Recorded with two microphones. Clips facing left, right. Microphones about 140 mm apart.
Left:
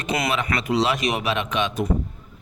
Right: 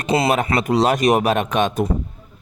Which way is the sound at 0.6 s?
45° right (ahead or behind).